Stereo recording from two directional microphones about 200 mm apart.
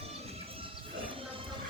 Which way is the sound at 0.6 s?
25° right (ahead or behind).